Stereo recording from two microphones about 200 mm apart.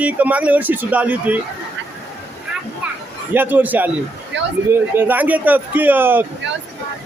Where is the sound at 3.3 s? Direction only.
10° right (ahead or behind).